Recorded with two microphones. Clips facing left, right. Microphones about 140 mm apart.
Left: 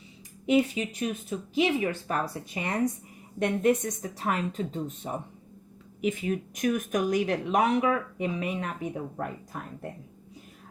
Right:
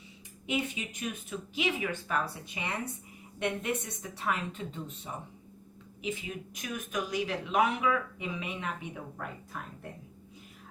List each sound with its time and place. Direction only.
0.4 s speech: 40° left (ahead or behind)